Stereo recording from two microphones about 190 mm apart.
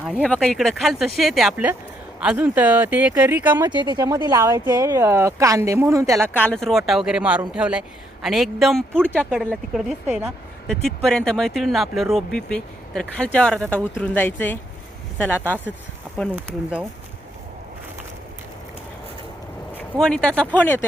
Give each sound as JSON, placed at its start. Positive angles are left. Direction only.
{"t": 0.0, "sound": "a woman's voice", "side_deg": -5}
{"t": 6.3, "sound": "a woman's voice", "side_deg": 5}
{"t": 16.3, "sound": "speech", "side_deg": -5}
{"t": 19.7, "sound": "speech", "side_deg": 5}